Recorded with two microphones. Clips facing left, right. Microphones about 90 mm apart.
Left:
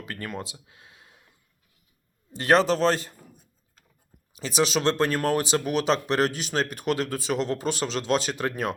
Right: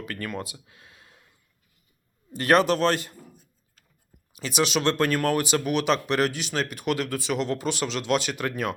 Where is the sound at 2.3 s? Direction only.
25° left (ahead or behind).